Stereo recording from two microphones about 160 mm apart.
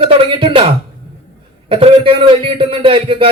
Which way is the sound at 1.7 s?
35° right (ahead or behind).